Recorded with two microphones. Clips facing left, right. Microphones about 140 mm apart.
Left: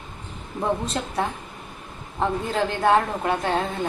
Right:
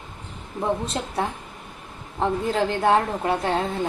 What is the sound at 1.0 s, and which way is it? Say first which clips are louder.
Speech: even; 25° right (ahead or behind).